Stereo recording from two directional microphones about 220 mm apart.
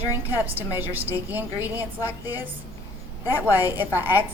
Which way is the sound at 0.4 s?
10° right (ahead or behind).